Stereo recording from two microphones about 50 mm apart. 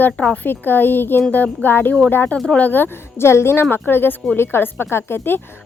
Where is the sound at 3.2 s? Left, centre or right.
Left.